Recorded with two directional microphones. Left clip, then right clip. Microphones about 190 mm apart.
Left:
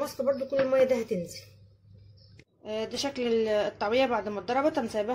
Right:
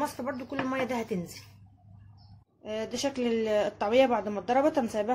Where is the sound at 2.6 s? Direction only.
Centre (ahead or behind).